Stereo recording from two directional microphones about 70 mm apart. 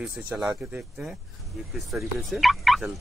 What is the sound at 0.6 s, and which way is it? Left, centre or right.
Speech, centre.